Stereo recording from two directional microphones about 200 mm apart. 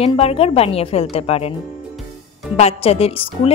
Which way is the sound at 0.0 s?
30° left (ahead or behind).